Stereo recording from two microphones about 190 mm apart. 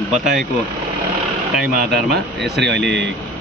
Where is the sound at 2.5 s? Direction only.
65° right (ahead or behind).